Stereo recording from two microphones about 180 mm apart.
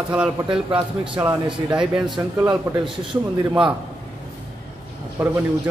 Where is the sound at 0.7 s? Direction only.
25° right (ahead or behind).